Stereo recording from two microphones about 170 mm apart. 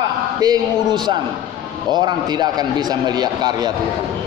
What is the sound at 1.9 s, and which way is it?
A man's voice, 25° right (ahead or behind).